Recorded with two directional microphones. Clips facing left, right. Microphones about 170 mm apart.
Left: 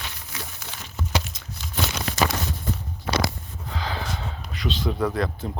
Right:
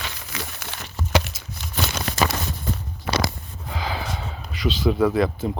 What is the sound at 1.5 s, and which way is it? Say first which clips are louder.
Crumpling: right 1 dB; 50° right (ahead or behind).